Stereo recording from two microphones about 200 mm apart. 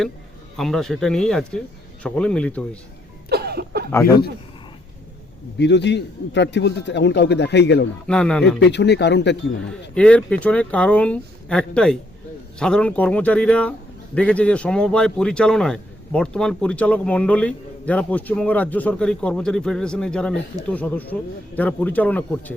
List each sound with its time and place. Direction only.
0.5 s a man's voice: centre (ahead or behind)
3.2 s cough: 55° right (ahead or behind)
5.5 s a man's voice: 60° left (ahead or behind)
8.0 s a man's voice: 5° left (ahead or behind)
8.5 s a man's voice: 60° left (ahead or behind)
9.6 s a man's voice: 5° left (ahead or behind)